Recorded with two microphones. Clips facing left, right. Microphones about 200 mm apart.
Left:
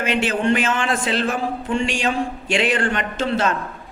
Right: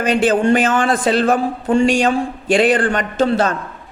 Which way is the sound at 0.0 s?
40° right (ahead or behind).